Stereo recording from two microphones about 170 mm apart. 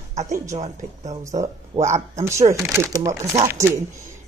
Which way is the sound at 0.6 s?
40° right (ahead or behind).